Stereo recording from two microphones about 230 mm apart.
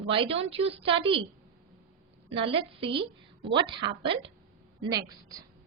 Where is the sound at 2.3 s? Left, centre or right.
Right.